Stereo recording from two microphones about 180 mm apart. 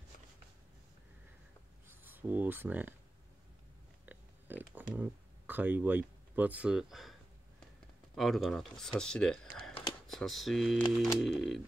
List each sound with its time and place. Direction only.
1.9 s speech: 10° right (ahead or behind)
4.0 s a sound: 10° right (ahead or behind)
8.1 s speech: centre (ahead or behind)